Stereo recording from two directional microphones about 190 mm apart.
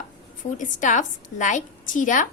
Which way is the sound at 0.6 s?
40° left (ahead or behind).